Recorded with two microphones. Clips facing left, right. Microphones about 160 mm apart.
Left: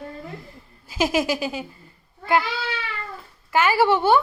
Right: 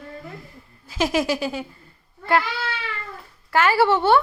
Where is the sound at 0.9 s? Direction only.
5° left (ahead or behind).